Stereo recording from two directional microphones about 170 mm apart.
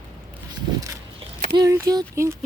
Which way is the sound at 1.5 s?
20° right (ahead or behind).